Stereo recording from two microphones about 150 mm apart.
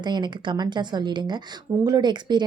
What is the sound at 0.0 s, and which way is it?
A woman's voice, 30° right (ahead or behind).